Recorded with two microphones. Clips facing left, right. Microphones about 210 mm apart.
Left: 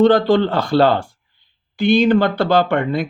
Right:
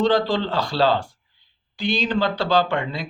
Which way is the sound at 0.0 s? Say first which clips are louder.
Left 7 dB; 55° left (ahead or behind).